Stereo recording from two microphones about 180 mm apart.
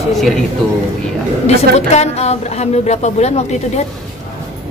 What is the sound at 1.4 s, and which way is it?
A woman's voice, 40° left (ahead or behind).